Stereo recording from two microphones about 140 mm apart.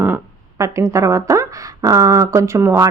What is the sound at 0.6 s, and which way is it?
A woman's voice, 20° right (ahead or behind).